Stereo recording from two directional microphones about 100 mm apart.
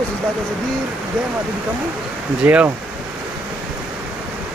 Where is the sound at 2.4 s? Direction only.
15° right (ahead or behind).